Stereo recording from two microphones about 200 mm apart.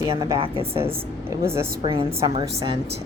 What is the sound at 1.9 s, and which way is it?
Speech, 25° right (ahead or behind).